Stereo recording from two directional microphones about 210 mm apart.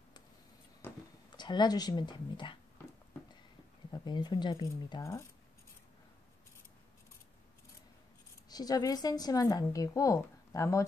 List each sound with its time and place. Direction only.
0.8 s a sound: 10° left (ahead or behind)
1.3 s speech: 20° left (ahead or behind)
3.9 s speech: 20° left (ahead or behind)
8.5 s a woman's voice: 20° left (ahead or behind)